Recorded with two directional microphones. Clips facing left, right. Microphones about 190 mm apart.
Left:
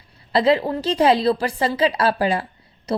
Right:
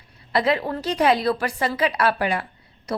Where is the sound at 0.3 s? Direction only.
30° left (ahead or behind).